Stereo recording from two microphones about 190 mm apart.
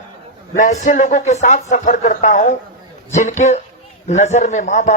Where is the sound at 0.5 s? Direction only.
40° left (ahead or behind).